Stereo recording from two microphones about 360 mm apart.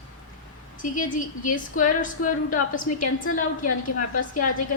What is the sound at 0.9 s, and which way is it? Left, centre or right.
A woman's voice, left.